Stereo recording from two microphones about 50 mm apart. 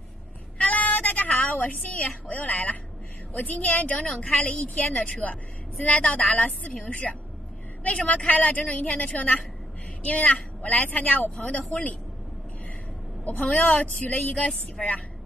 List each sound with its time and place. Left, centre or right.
0.6 s a sound: left
1.5 s a woman's voice: left
13.6 s a woman's voice: left